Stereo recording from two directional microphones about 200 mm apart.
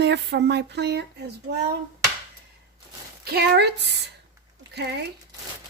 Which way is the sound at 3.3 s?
55° right (ahead or behind).